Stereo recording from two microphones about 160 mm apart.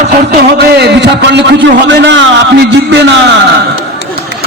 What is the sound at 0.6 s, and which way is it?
Speech, 90° right.